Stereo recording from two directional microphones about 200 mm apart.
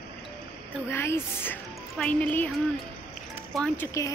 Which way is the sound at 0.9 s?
10° left (ahead or behind).